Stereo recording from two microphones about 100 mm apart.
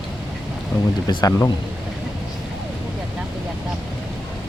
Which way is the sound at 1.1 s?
45° left (ahead or behind).